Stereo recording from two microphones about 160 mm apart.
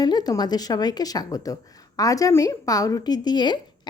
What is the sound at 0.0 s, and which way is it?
A woman's voice, 25° left (ahead or behind).